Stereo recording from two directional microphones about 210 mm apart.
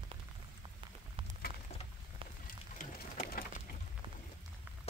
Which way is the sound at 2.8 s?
40° left (ahead or behind).